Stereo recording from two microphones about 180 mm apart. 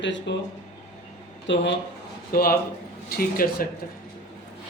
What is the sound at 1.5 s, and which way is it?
Speech, 90° left.